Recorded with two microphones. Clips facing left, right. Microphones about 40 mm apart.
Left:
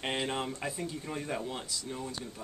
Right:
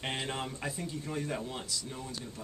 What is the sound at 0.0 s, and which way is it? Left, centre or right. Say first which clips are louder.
Speech: left 3 dB; centre.